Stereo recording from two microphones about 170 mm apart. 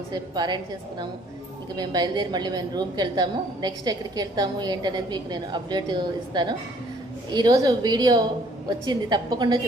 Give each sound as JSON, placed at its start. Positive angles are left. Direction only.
{"t": 0.1, "sound": "a woman's voice", "side_deg": -25}